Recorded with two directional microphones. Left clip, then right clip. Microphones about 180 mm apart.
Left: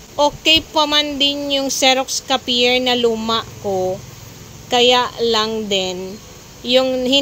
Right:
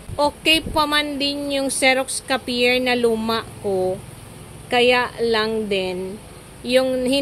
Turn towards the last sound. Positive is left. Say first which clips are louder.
# left 4 dB
turn(degrees=10)  # may be behind; listen again after turning